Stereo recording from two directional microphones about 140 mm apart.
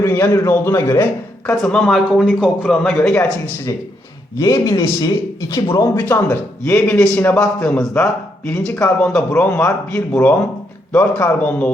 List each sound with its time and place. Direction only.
0.0 s speech: 20° left (ahead or behind)
1.6 s a man's voice: 5° left (ahead or behind)
4.4 s speech: 25° left (ahead or behind)